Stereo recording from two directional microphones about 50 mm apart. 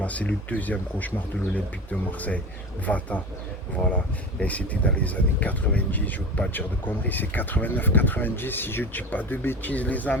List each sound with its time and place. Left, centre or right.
0.0 s speech: left